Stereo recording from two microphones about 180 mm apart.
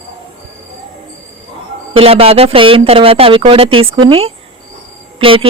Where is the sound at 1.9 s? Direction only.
30° right (ahead or behind).